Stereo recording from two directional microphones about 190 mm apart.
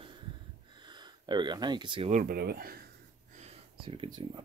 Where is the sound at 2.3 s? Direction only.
55° right (ahead or behind).